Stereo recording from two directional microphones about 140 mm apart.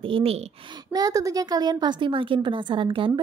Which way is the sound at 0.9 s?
25° right (ahead or behind).